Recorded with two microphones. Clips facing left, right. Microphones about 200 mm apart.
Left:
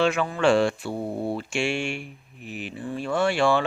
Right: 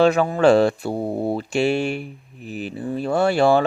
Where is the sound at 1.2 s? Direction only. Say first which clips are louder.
Right 7 dB; 40° right (ahead or behind).